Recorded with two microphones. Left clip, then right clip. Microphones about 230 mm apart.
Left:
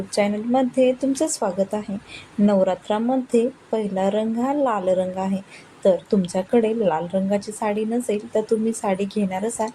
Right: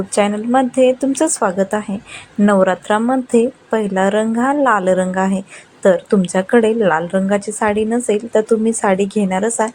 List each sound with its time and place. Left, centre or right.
0.2 s speech: centre